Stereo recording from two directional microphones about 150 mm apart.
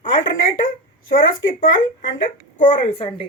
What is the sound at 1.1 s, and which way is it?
Speech, 70° left (ahead or behind).